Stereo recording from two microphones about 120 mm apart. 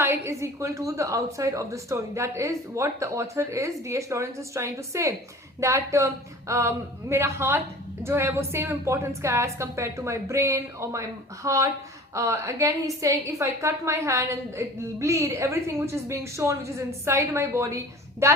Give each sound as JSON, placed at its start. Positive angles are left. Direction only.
{"t": 0.0, "sound": "a woman's voice", "side_deg": -25}